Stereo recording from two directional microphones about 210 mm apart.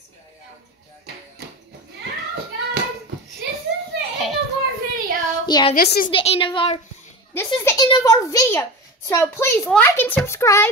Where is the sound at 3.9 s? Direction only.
55° right (ahead or behind).